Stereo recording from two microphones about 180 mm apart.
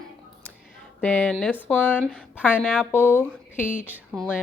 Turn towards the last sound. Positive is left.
turn(degrees=0)  # may be behind; listen again after turning